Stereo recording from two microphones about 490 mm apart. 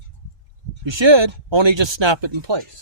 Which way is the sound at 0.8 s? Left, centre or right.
Right.